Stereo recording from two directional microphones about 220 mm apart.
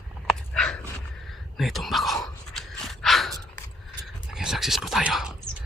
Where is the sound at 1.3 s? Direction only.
Centre (ahead or behind).